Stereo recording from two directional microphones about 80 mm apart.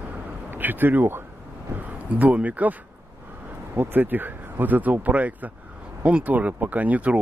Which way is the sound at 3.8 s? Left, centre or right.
Right.